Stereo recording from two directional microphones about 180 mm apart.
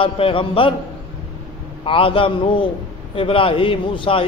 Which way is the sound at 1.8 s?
30° left (ahead or behind).